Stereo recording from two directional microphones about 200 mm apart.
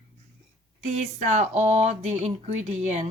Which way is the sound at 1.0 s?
35° right (ahead or behind).